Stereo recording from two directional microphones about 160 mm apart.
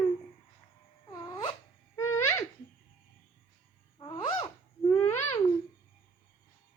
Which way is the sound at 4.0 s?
30° left (ahead or behind).